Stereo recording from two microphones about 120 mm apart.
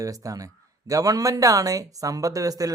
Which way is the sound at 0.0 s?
30° right (ahead or behind).